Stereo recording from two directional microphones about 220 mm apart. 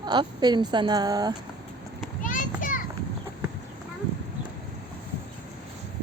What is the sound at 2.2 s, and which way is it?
Children playing, 35° left (ahead or behind).